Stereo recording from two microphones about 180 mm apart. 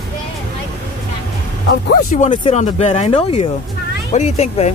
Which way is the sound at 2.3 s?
30° left (ahead or behind).